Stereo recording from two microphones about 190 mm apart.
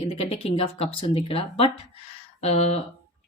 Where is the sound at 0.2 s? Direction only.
30° left (ahead or behind).